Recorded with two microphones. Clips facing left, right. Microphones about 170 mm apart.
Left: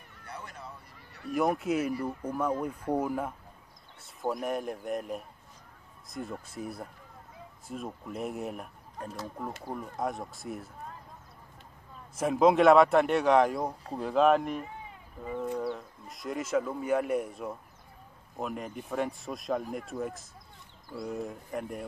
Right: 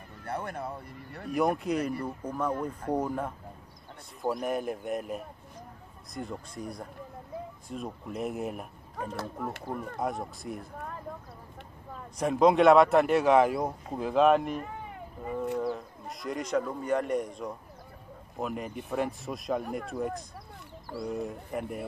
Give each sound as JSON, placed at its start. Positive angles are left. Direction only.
{"t": 0.2, "sound": "speech", "side_deg": -55}
{"t": 1.3, "sound": "speech", "side_deg": 0}
{"t": 9.2, "sound": "speech", "side_deg": -60}
{"t": 9.9, "sound": "speech", "side_deg": 0}
{"t": 12.2, "sound": "speech", "side_deg": 5}
{"t": 14.6, "sound": "cat", "side_deg": -60}
{"t": 15.3, "sound": "speech", "side_deg": -5}